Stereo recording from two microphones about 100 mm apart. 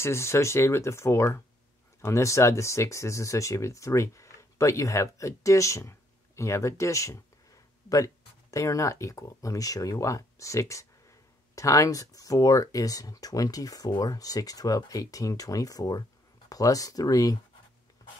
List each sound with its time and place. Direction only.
0.0 s speech: 25° left (ahead or behind)